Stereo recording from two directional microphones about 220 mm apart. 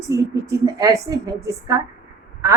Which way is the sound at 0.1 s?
15° right (ahead or behind).